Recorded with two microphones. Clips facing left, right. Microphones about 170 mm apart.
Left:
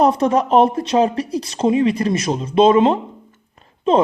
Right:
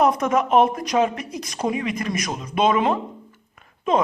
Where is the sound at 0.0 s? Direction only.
30° left (ahead or behind).